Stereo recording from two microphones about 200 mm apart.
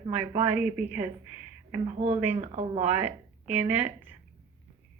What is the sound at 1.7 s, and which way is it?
Speech, 30° right (ahead or behind).